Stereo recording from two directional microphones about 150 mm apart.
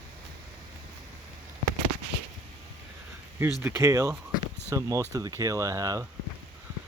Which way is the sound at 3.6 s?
20° right (ahead or behind).